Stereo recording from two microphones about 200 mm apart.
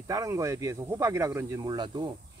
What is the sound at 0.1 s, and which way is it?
Speech, 15° right (ahead or behind).